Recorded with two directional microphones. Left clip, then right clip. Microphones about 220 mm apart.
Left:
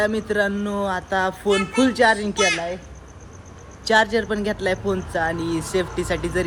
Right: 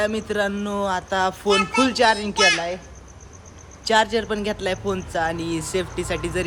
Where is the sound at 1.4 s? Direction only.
30° right (ahead or behind).